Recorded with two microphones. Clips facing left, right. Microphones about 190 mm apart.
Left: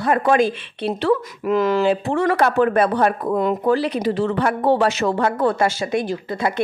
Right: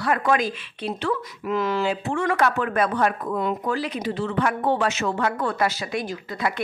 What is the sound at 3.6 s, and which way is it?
Speech, 30° left (ahead or behind).